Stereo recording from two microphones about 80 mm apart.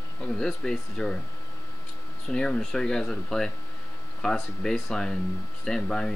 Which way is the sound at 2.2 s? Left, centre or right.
Centre.